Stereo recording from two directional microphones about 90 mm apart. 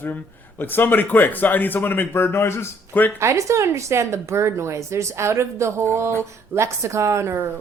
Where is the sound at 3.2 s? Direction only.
35° right (ahead or behind).